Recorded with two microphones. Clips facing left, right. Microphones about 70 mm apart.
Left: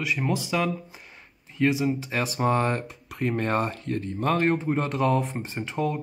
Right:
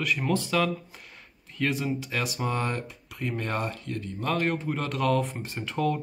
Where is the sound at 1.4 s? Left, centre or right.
Centre.